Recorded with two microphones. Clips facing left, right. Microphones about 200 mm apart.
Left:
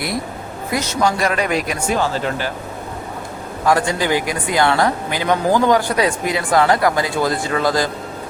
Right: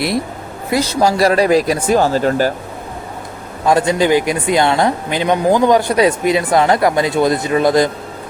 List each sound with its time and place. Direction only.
0.7 s speech: 30° right (ahead or behind)
3.7 s speech: 20° right (ahead or behind)